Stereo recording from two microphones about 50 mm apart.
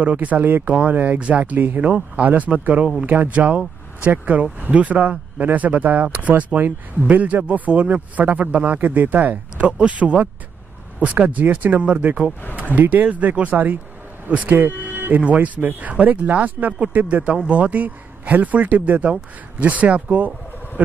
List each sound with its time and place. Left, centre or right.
0.0 s speech: right
9.7 s a man's voice: right